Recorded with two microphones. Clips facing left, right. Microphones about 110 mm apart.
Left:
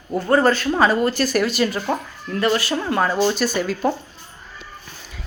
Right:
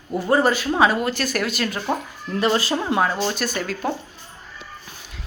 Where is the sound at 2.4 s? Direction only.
20° right (ahead or behind).